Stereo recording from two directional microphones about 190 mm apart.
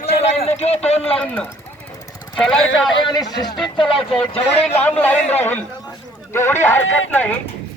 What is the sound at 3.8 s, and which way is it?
Speech, 5° left (ahead or behind).